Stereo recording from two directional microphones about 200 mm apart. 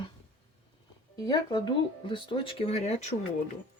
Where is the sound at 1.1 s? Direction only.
20° left (ahead or behind).